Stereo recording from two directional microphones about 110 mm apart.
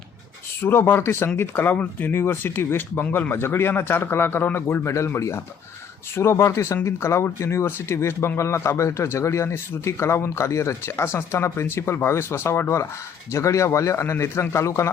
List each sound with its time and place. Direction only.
0.6 s speech: 20° left (ahead or behind)